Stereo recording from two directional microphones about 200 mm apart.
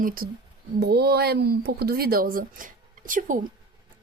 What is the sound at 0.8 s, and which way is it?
A woman's voice, 55° right (ahead or behind).